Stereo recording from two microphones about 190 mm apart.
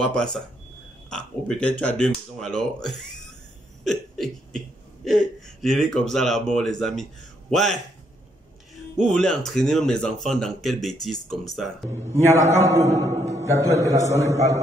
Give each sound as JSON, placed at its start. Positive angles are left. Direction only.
{"t": 0.0, "sound": "speech", "side_deg": 5}
{"t": 3.8, "sound": "a sound", "side_deg": 5}
{"t": 9.0, "sound": "speech", "side_deg": 5}
{"t": 11.9, "sound": "a man's voice", "side_deg": -10}